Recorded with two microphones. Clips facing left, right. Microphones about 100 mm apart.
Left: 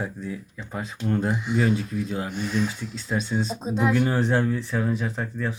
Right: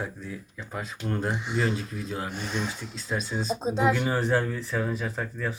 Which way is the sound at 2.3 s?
35° right (ahead or behind).